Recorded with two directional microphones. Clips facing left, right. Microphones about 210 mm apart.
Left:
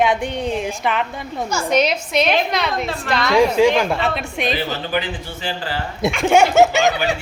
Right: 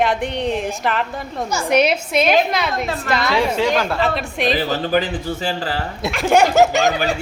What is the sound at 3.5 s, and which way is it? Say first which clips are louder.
Speech: left 4 dB; 10° left (ahead or behind).